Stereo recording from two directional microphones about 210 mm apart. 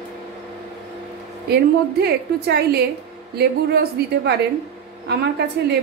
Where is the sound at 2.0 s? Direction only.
50° right (ahead or behind).